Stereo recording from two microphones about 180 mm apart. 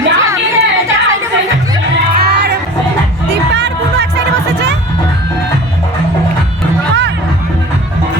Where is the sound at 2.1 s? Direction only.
65° right (ahead or behind).